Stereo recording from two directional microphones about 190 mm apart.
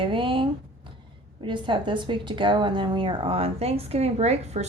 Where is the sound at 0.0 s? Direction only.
25° right (ahead or behind).